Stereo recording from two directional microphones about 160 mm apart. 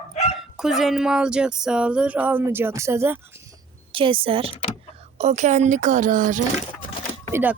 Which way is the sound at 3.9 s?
35° right (ahead or behind).